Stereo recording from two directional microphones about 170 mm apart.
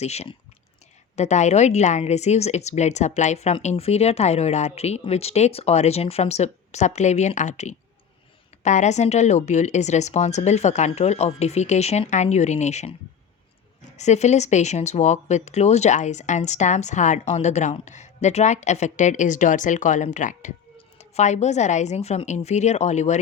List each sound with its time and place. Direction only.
0.0 s a woman's voice: 40° left (ahead or behind)